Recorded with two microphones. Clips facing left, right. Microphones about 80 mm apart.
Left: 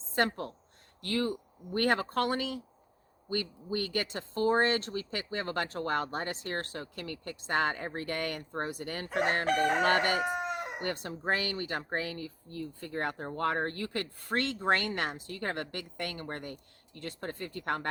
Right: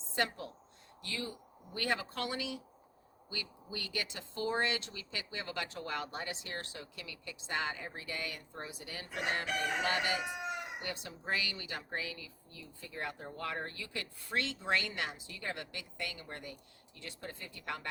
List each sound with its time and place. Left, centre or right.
0.2 s speech: left